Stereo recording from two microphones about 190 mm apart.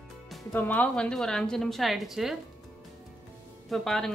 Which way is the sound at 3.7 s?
Centre (ahead or behind).